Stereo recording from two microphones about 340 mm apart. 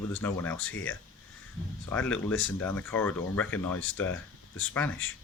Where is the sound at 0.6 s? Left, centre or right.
Left.